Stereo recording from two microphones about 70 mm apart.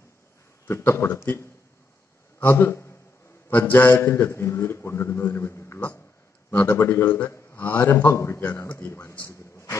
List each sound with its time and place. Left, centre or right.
0.7 s a man's voice: left